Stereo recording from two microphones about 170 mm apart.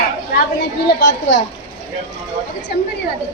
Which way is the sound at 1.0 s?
90° left.